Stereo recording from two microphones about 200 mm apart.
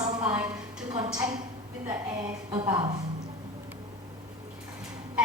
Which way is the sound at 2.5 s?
25° right (ahead or behind).